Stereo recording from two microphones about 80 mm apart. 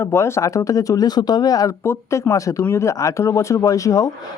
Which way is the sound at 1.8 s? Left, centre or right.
Left.